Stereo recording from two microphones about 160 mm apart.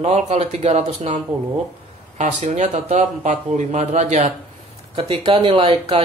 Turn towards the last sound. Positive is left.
turn(degrees=-35)  # may be behind; listen again after turning